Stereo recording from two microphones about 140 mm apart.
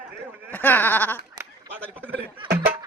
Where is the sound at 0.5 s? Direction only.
15° left (ahead or behind).